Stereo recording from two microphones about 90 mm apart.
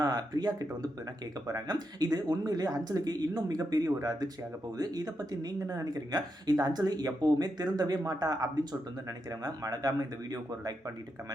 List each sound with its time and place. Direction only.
0.0 s speech: 45° right (ahead or behind)